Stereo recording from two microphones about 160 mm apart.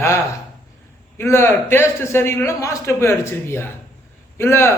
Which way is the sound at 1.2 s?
15° left (ahead or behind).